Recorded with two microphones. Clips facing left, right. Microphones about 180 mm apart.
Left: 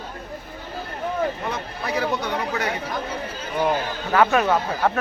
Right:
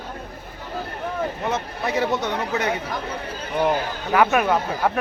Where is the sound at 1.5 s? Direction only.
25° right (ahead or behind).